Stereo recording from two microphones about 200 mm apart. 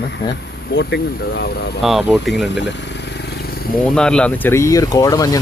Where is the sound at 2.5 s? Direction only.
60° left (ahead or behind).